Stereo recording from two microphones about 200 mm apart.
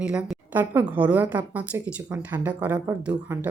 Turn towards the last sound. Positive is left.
turn(degrees=-10)  # may be behind; listen again after turning